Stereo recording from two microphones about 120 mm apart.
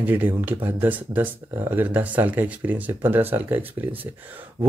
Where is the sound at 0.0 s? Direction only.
15° right (ahead or behind).